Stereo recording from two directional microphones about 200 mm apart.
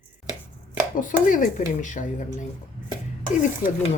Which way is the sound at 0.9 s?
40° left (ahead or behind).